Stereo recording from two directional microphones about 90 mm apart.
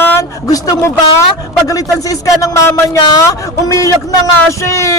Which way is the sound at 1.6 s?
40° left (ahead or behind).